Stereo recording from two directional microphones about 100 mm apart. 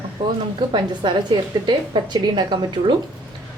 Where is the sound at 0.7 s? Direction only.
55° right (ahead or behind).